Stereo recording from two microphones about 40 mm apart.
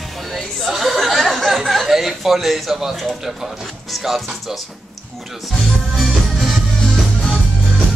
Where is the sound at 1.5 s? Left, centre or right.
Centre.